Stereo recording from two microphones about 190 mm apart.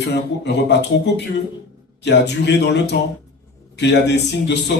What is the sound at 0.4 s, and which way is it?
Speech, 65° left (ahead or behind).